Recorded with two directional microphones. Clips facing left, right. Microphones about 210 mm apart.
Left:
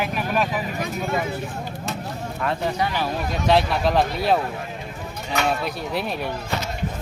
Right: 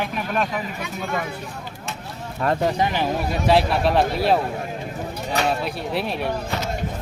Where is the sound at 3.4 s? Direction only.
5° right (ahead or behind).